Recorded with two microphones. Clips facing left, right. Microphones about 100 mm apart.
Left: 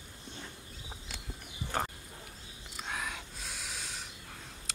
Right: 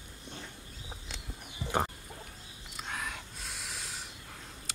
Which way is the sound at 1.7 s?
15° right (ahead or behind).